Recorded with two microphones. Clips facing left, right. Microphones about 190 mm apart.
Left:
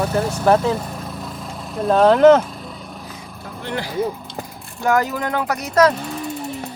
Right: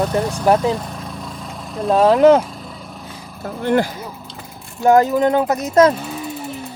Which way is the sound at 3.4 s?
50° right (ahead or behind).